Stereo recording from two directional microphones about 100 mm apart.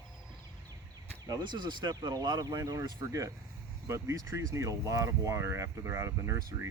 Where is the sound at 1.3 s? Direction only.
45° right (ahead or behind).